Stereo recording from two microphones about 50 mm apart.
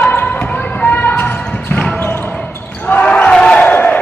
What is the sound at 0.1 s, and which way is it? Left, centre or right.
Basketball bounce, left.